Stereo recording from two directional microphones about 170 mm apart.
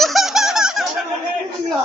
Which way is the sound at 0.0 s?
Centre (ahead or behind).